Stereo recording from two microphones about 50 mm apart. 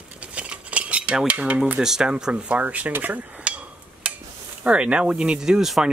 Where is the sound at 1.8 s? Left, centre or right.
Centre; by 2.9 s right.